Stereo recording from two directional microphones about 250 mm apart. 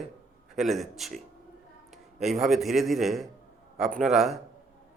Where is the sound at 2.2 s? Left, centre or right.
Right.